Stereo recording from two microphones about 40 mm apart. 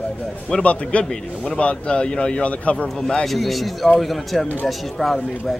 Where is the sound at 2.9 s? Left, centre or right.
Centre.